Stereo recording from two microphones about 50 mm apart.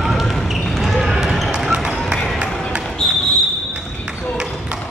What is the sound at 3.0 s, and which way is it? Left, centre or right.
Basketball bounce, centre.